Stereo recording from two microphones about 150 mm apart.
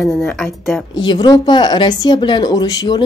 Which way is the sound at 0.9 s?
30° left (ahead or behind).